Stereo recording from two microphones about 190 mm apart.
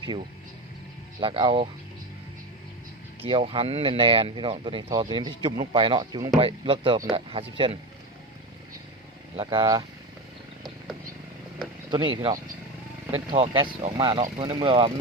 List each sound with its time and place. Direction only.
1.2 s speech: 25° right (ahead or behind)
3.2 s speech: 25° right (ahead or behind)
9.3 s speech: 30° right (ahead or behind)
11.9 s speech: 25° right (ahead or behind)